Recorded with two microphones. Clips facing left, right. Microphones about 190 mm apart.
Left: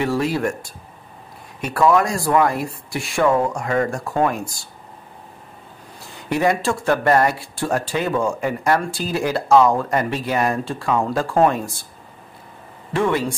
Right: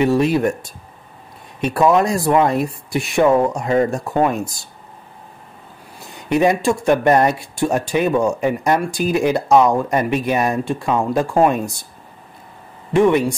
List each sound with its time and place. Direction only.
0.0 s speech: 20° right (ahead or behind)
1.6 s speech: 20° right (ahead or behind)
6.2 s speech: 20° right (ahead or behind)
12.9 s speech: 20° right (ahead or behind)